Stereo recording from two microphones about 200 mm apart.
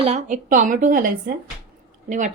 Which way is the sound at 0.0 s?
35° right (ahead or behind).